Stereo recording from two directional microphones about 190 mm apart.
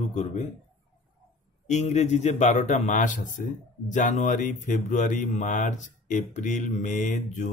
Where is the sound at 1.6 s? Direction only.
35° left (ahead or behind).